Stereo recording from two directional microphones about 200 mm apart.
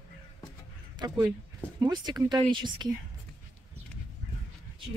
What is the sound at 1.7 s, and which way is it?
Speech, 20° right (ahead or behind).